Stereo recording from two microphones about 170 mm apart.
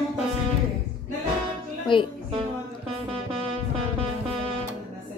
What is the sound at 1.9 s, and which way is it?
Speech, 30° left (ahead or behind).